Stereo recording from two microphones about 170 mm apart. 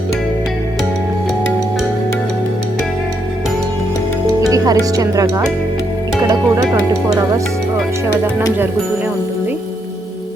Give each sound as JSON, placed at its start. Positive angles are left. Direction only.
{"t": 4.4, "sound": "speech", "side_deg": -20}
{"t": 7.1, "sound": "speech", "side_deg": -20}